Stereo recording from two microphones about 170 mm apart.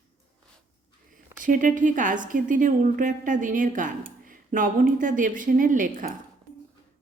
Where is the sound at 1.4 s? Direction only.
50° right (ahead or behind).